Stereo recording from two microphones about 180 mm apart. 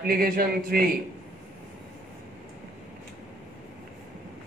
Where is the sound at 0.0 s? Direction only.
55° right (ahead or behind).